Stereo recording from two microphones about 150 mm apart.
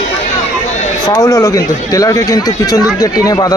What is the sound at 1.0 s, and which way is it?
Speech, 25° left (ahead or behind).